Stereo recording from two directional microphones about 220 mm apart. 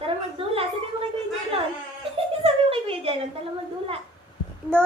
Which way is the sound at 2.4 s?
25° right (ahead or behind).